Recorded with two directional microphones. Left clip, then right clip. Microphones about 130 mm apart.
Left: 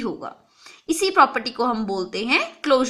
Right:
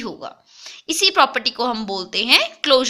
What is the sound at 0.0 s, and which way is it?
Speech, 15° right (ahead or behind).